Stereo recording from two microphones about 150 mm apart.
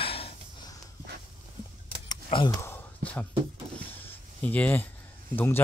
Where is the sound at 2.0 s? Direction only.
30° left (ahead or behind).